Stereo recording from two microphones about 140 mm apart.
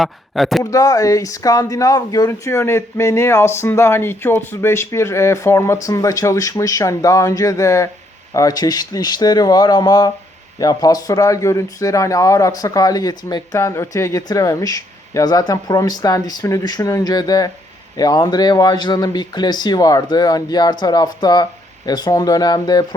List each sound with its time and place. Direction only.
0.0 s speech: centre (ahead or behind)
0.6 s speech: 25° left (ahead or behind)